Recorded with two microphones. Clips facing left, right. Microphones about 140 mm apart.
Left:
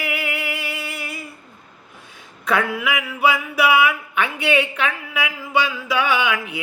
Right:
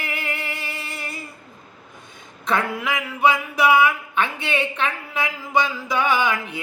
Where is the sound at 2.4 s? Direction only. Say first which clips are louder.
Left 2 dB; 5° left (ahead or behind).